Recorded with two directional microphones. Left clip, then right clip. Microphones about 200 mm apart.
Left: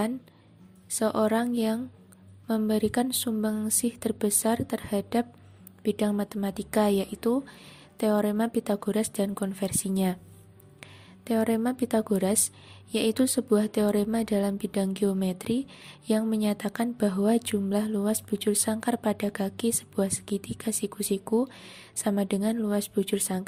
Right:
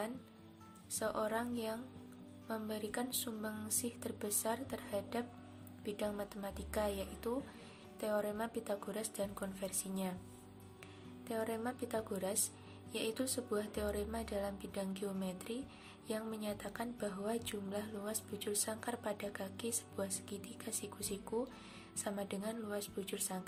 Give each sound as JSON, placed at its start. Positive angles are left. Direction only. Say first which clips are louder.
{"t": 0.9, "sound": "a woman's voice", "louder": "left 13 dB", "side_deg": 40}
{"t": 11.3, "sound": "a woman's voice", "louder": "left 13 dB", "side_deg": 45}